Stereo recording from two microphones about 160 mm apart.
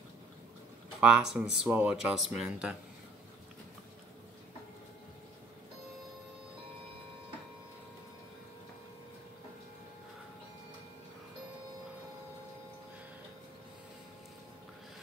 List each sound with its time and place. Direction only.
1.0 s speech: 5° right (ahead or behind)